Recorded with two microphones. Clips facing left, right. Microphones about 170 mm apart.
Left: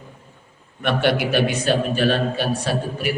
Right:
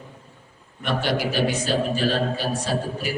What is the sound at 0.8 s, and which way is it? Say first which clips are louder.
A man's voice: left 4 dB; 65° left (ahead or behind).